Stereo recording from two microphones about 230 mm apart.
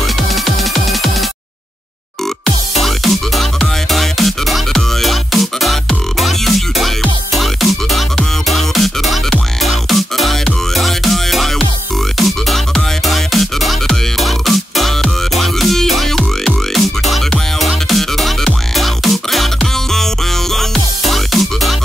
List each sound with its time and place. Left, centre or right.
2.8 s music: centre
21.1 s music: centre